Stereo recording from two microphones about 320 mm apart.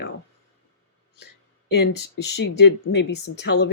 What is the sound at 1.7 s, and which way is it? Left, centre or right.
Speech, left.